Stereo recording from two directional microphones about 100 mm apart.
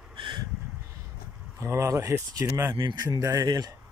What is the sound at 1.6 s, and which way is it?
Speech, 30° right (ahead or behind).